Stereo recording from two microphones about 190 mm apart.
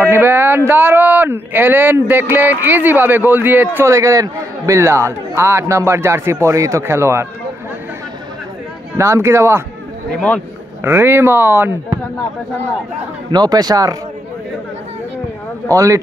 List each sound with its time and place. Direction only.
0.0 s speech: 10° right (ahead or behind)
8.9 s speech: 15° right (ahead or behind)
10.8 s speech: 10° right (ahead or behind)
13.3 s speech: 20° right (ahead or behind)
15.7 s speech: 15° right (ahead or behind)